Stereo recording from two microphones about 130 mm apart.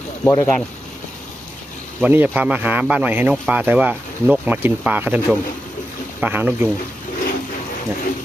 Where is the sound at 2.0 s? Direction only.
15° right (ahead or behind).